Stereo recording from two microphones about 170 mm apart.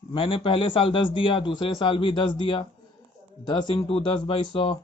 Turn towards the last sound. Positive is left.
turn(degrees=30)  # may be behind; listen again after turning